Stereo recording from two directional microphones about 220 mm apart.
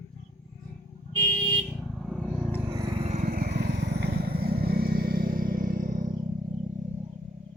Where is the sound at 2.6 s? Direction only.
20° right (ahead or behind); by 6.1 s 40° right (ahead or behind).